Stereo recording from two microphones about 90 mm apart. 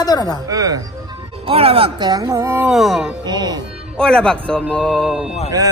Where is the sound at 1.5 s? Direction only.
90° right.